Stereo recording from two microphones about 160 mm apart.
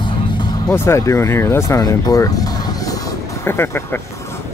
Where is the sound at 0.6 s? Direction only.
15° left (ahead or behind).